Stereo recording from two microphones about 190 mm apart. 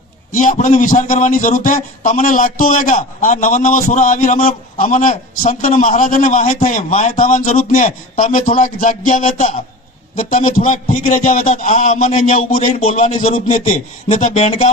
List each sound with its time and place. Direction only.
0.3 s a man's voice: 40° left (ahead or behind)